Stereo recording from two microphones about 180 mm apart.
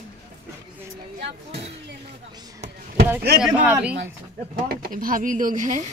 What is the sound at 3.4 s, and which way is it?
Speech, 5° right (ahead or behind).